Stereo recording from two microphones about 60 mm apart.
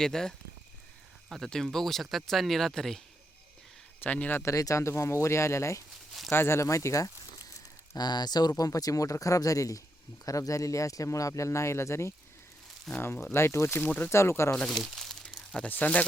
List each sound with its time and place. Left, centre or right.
0.0 s speech: centre
4.0 s speech: left
4.4 s speech: left
6.3 s speech: left
6.7 s speech: left
7.9 s speech: left
12.9 s speech: centre
13.3 s speech: left
14.7 s crumpling: centre
15.7 s speech: left